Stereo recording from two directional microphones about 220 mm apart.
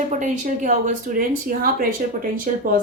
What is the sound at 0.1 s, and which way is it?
Speech, 35° right (ahead or behind).